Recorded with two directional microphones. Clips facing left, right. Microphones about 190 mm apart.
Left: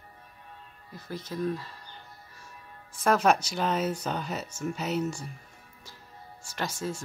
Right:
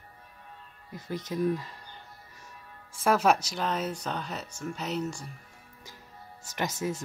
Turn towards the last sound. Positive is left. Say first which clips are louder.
# right 2 dB
turn(degrees=-20)  # may be behind; listen again after turning